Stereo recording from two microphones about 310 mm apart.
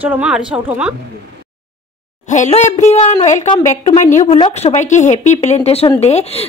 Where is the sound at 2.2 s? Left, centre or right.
Left.